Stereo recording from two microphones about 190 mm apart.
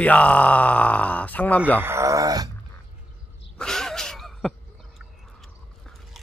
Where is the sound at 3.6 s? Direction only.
Centre (ahead or behind).